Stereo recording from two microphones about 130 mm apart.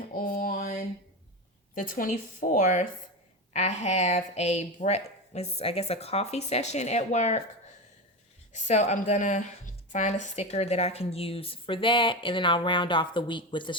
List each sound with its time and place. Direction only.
0.1 s mantra: 90° left
1.7 s a woman's voice: 90° left; by 7.4 s 65° left (ahead or behind)
8.5 s speech: 65° left (ahead or behind); by 13.7 s 40° left (ahead or behind)